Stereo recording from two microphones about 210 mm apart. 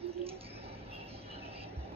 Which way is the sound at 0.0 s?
25° right (ahead or behind).